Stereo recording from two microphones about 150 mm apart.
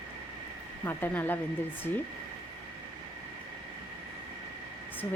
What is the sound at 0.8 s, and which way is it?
Speech, 15° left (ahead or behind).